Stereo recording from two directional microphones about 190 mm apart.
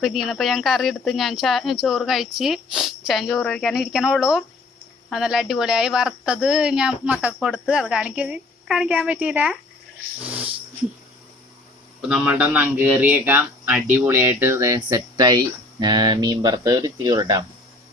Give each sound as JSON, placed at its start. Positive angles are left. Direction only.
{"t": 0.0, "sound": "speech", "side_deg": 0}
{"t": 7.3, "sound": "a woman's voice", "side_deg": 5}
{"t": 12.0, "sound": "a woman's voice", "side_deg": -5}